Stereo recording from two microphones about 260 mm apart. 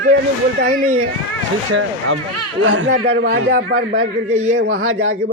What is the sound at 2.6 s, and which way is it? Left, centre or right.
A man's voice, right.